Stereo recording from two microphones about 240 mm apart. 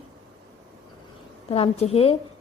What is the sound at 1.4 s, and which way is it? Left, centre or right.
Speech, left.